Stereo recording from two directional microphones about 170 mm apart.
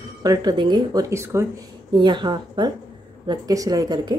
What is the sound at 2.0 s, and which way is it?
A woman's voice, 25° right (ahead or behind).